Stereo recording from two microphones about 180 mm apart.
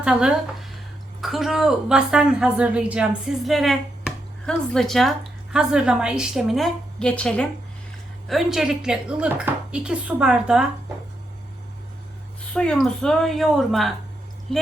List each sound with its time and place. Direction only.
0.0 s speech: 5° right (ahead or behind)
12.5 s speech: centre (ahead or behind)